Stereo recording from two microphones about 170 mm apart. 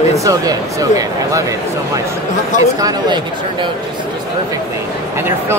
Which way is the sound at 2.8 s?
25° right (ahead or behind).